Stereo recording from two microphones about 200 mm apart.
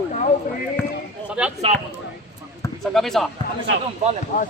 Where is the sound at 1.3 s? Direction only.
5° right (ahead or behind).